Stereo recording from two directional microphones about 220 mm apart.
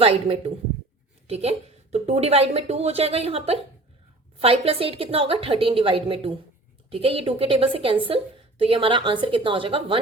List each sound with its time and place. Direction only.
0.0 s a woman's voice: 25° right (ahead or behind)